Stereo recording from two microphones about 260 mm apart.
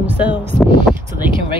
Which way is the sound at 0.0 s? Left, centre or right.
Centre.